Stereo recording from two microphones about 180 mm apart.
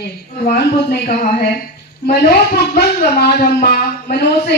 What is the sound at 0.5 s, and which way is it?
Speech, 55° left (ahead or behind).